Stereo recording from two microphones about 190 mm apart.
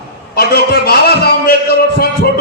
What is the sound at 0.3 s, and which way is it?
A man's voice, 55° left (ahead or behind).